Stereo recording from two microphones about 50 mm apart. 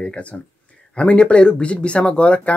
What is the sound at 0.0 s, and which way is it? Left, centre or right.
Speech, left.